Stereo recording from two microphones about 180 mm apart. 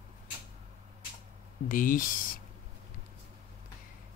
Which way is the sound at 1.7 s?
50° left (ahead or behind).